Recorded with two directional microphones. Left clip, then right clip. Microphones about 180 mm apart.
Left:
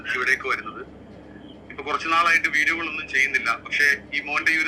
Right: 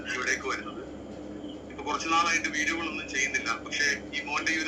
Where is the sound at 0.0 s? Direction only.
30° left (ahead or behind).